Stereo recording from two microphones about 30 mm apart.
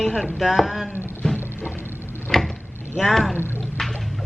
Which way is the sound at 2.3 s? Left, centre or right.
Centre.